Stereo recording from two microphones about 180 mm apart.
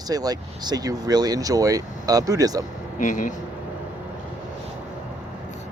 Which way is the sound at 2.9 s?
45° left (ahead or behind).